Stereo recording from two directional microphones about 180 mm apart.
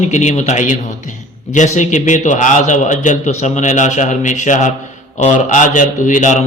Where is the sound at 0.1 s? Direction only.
40° left (ahead or behind).